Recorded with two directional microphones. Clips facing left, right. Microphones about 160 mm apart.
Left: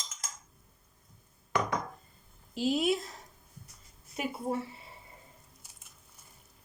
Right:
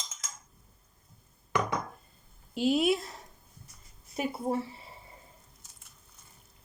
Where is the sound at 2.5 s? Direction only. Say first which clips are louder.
Right 3 dB; 65° right (ahead or behind).